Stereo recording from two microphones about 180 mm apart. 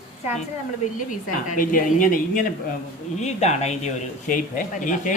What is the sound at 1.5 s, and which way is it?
Speech, 50° left (ahead or behind).